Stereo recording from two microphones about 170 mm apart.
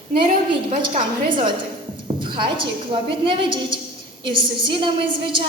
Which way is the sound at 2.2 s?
30° right (ahead or behind).